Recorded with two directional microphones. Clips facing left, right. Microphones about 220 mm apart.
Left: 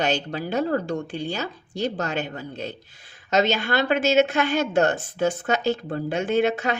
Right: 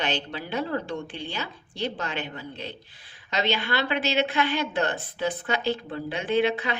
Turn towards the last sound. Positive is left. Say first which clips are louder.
# left 2 dB
turn(degrees=45)  # may be behind; listen again after turning